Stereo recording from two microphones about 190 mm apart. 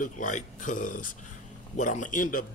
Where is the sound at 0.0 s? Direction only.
40° left (ahead or behind).